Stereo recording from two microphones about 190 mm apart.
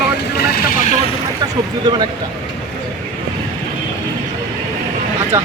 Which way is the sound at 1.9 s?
20° right (ahead or behind).